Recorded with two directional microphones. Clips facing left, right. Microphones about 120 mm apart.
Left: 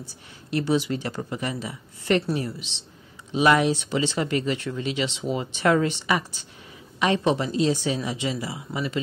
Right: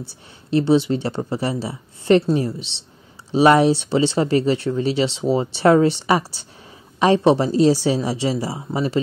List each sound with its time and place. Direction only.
0.5 s speech: 30° right (ahead or behind)